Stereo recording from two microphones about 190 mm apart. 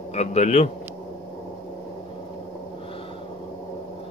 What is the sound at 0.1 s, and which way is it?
Speech, 35° left (ahead or behind).